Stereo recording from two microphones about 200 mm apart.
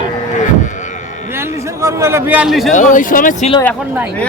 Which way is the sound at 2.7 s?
40° left (ahead or behind).